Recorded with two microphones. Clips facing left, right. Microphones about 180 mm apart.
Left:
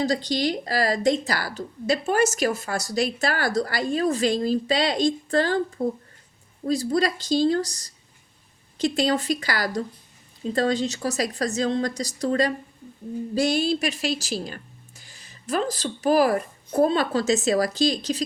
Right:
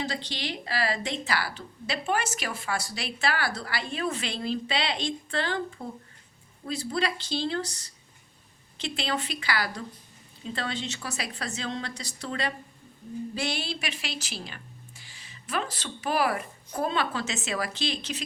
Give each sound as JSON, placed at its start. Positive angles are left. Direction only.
{"t": 0.0, "sound": "a woman's voice", "side_deg": 40}